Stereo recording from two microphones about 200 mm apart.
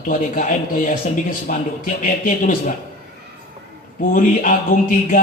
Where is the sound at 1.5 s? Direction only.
40° left (ahead or behind).